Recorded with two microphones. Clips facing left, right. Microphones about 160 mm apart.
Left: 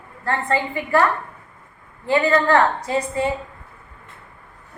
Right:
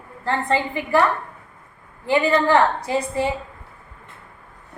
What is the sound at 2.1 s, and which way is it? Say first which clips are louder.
Speech: even; 15° right (ahead or behind).